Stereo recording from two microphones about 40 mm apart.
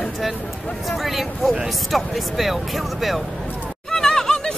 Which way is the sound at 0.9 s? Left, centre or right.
Centre.